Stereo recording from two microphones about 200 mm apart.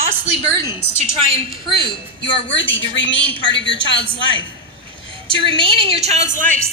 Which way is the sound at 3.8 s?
25° right (ahead or behind).